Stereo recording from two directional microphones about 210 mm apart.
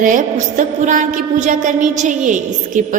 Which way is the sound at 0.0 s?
40° right (ahead or behind).